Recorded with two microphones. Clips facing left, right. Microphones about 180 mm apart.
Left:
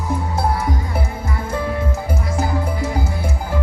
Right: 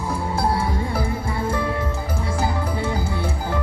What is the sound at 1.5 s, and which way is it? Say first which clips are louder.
Music: left 1 dB; 25° left (ahead or behind).